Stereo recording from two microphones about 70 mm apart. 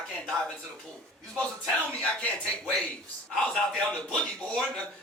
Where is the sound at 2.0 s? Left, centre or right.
Centre.